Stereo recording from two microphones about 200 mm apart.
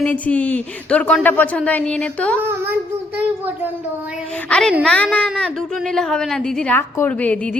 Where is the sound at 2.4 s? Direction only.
10° right (ahead or behind).